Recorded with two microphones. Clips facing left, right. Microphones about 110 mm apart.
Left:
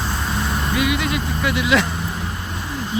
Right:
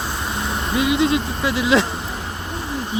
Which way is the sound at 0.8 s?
25° right (ahead or behind).